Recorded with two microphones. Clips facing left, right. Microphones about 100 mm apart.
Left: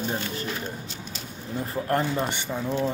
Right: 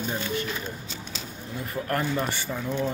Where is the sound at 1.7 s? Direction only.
25° left (ahead or behind).